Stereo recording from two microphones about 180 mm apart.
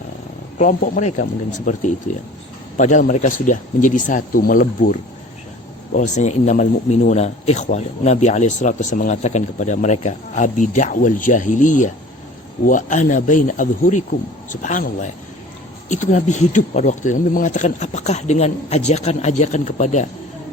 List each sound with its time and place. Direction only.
0.6 s speech: 45° left (ahead or behind)
6.0 s speech: 40° left (ahead or behind)
15.9 s speech: 40° left (ahead or behind)